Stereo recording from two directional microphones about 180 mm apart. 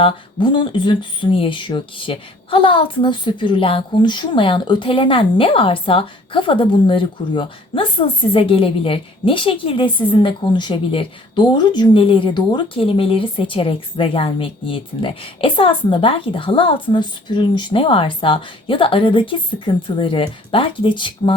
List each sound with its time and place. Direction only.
0.0 s speech: 25° left (ahead or behind)